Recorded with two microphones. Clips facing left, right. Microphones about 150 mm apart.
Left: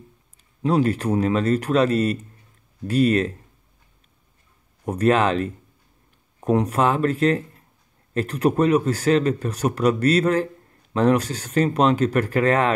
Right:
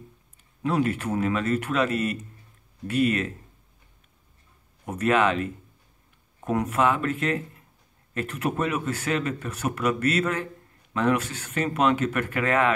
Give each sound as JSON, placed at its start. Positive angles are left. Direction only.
{"t": 0.6, "sound": "speech", "side_deg": 30}
{"t": 4.8, "sound": "speech", "side_deg": 35}
{"t": 6.5, "sound": "speech", "side_deg": 30}